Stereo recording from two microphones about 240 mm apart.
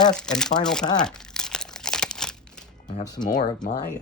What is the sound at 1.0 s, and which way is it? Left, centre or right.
Crumpling, centre.